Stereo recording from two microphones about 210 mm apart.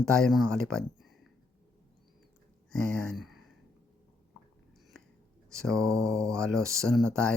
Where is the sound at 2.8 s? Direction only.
90° left.